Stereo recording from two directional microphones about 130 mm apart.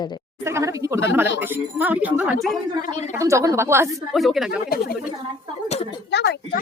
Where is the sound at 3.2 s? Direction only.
25° right (ahead or behind).